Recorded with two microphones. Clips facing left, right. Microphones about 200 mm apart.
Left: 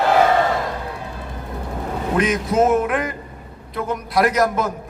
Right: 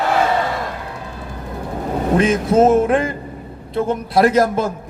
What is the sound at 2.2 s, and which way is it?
A man's voice, 30° right (ahead or behind).